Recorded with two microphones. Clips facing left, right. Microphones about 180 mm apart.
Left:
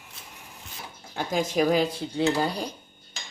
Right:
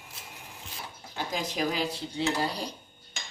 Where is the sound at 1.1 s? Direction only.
50° left (ahead or behind).